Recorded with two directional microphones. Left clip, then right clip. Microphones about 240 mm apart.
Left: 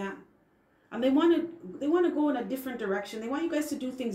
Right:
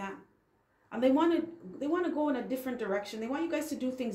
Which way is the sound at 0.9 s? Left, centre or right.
Right.